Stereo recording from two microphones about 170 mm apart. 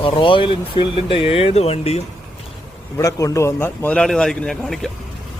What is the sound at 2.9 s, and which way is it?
Speech, 20° left (ahead or behind).